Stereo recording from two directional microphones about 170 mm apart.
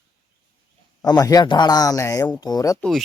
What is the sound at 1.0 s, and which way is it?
Speech, 20° left (ahead or behind).